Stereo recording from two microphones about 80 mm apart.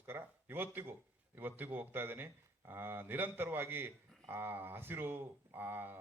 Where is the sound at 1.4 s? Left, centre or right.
Right.